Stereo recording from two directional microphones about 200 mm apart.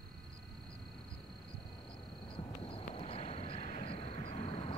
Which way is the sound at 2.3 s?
25° left (ahead or behind).